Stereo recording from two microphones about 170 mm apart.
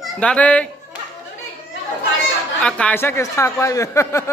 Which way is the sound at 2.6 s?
5° left (ahead or behind).